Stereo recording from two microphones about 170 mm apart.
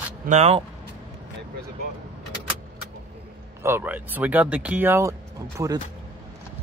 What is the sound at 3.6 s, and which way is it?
Speech, 10° right (ahead or behind).